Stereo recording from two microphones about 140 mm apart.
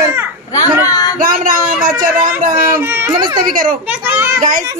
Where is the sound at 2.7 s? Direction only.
15° right (ahead or behind).